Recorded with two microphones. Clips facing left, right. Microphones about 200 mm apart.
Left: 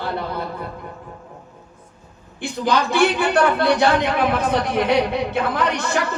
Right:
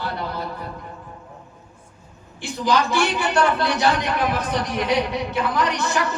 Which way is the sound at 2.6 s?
55° left (ahead or behind).